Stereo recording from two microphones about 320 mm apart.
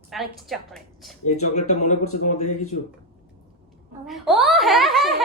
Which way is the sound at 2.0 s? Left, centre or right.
Left.